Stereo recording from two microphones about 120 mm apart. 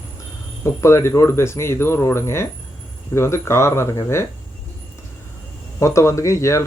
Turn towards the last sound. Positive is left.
turn(degrees=25)  # may be behind; listen again after turning